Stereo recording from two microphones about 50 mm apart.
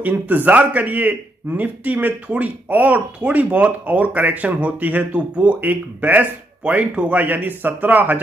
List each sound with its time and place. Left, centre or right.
0.3 s a man's voice: right
6.6 s a man's voice: right